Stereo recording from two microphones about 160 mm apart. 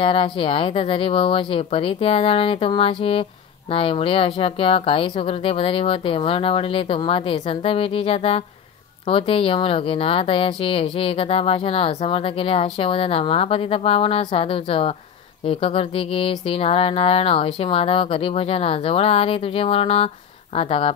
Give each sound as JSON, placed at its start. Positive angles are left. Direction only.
{"t": 0.0, "sound": "speech", "side_deg": 35}